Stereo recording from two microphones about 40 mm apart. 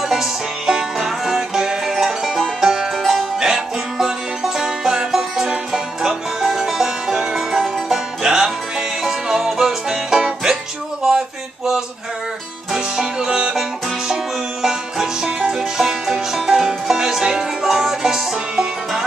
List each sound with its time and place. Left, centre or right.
0.1 s music: centre
11.1 s a sound: centre
12.7 s music: centre